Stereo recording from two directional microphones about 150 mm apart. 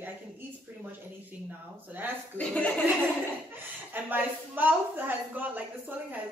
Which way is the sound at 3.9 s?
10° right (ahead or behind).